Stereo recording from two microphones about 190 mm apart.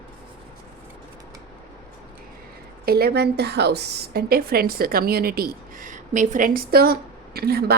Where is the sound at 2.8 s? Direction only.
55° right (ahead or behind).